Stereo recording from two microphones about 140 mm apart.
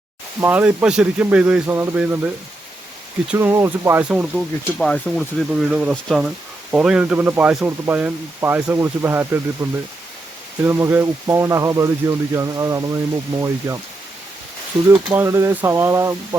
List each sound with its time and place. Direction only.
0.4 s speech: 10° right (ahead or behind)
3.3 s speech: 20° right (ahead or behind)
4.2 s speech: centre (ahead or behind); by 13.7 s 20° right (ahead or behind)
15.1 s speech: 20° right (ahead or behind)